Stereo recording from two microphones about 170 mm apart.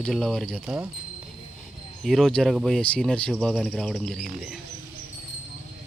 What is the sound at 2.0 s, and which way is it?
Speech, centre (ahead or behind).